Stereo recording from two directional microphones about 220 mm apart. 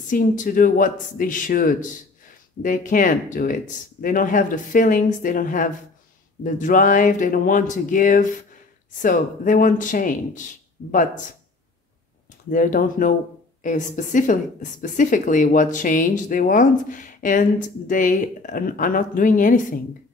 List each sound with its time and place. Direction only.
0.1 s a woman's voice: 35° left (ahead or behind)
12.4 s a woman's voice: 35° left (ahead or behind)